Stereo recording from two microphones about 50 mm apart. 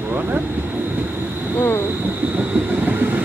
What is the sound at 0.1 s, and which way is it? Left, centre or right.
Vehicle, right.